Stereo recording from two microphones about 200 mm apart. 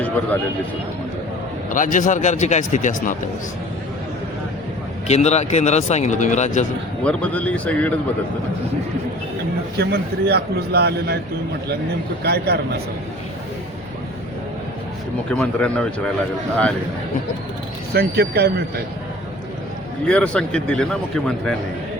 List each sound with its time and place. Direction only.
1.7 s speech: 40° left (ahead or behind)
5.0 s speech: 35° left (ahead or behind)
7.0 s speech: 5° left (ahead or behind)
9.7 s speech: 55° right (ahead or behind)
12.2 s speech: 55° right (ahead or behind)
15.3 s a man's voice: 5° left (ahead or behind)
17.9 s speech: 50° right (ahead or behind)
20.1 s a man's voice: 5° left (ahead or behind)